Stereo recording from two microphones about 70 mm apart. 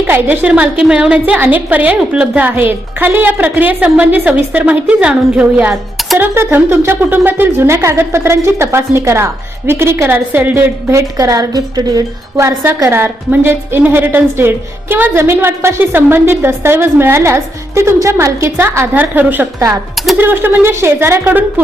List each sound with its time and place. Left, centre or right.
0.1 s a woman's voice: right
10.1 s a woman's voice: right
10.5 s speech: right
12.4 s speech: right
12.9 s speech: right
18.9 s a woman's voice: right